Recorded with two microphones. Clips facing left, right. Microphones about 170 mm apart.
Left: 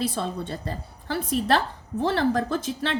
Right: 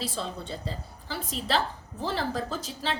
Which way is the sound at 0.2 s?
60° left (ahead or behind).